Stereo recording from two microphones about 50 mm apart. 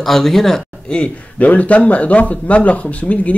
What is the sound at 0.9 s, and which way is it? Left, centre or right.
Speech, left.